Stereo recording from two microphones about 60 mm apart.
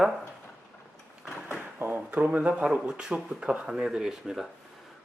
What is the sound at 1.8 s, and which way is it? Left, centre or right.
Speech, right.